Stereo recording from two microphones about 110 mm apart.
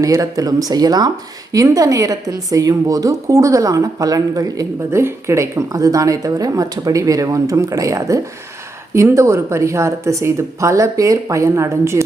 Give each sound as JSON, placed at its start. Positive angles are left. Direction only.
{"t": 0.0, "sound": "a woman's voice", "side_deg": -30}